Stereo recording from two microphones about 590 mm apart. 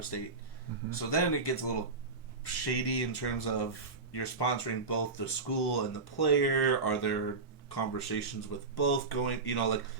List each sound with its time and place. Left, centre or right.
0.9 s speech: left